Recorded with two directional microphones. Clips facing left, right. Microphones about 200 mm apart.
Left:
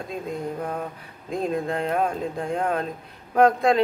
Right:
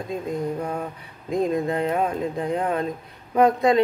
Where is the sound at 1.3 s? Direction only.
Centre (ahead or behind).